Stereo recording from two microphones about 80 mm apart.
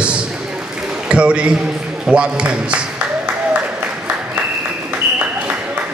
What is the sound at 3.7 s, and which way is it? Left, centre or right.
Applause, right.